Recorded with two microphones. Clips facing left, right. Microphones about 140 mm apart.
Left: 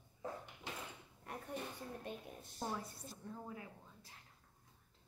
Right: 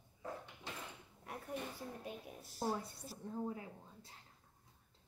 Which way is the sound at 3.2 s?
30° right (ahead or behind).